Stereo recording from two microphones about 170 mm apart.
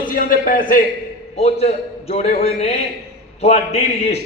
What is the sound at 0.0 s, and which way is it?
Speech, 55° left (ahead or behind).